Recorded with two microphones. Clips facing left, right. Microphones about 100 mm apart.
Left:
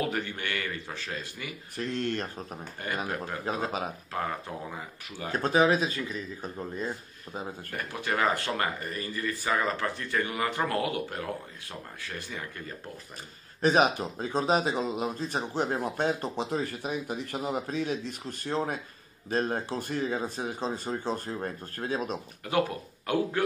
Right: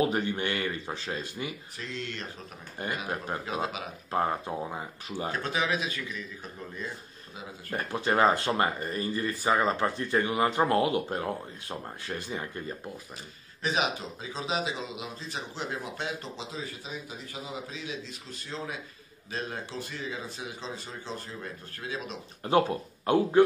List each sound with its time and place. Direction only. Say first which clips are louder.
0.0 s speech: right 4 dB; 20° right (ahead or behind)
1.8 s speech: left 8 dB; 50° left (ahead or behind)
3.4 s speech: left 5 dB; 40° left (ahead or behind)
4.1 s speech: right 7 dB; 30° right (ahead or behind)
5.3 s speech: left 8 dB; 40° left (ahead or behind)
7.7 s speech: right 5 dB; 25° right (ahead or behind)
13.6 s speech: left 6 dB; 45° left (ahead or behind)
22.4 s speech: right 4 dB; 25° right (ahead or behind)